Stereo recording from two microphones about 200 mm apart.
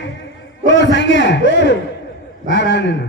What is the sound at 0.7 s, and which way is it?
Speech, 60° left (ahead or behind).